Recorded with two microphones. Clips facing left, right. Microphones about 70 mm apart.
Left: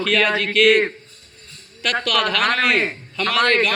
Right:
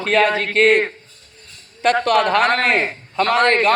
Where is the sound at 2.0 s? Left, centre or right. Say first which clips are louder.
Right 3 dB; right.